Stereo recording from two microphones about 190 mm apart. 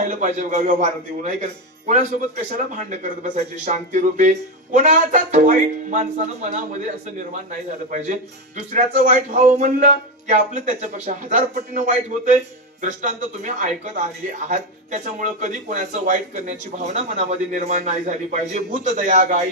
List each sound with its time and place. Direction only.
0.0 s speech: 40° right (ahead or behind)
2.5 s speech: 40° right (ahead or behind)
7.9 s speech: 40° right (ahead or behind)
12.8 s speech: 40° right (ahead or behind)